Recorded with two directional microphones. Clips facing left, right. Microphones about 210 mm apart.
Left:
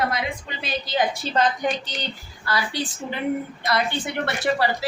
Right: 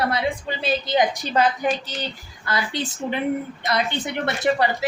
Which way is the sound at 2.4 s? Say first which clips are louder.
Even; 20° right (ahead or behind).